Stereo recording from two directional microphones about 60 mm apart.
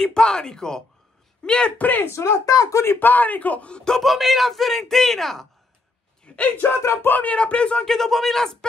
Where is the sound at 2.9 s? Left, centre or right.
Left; by 4.0 s centre.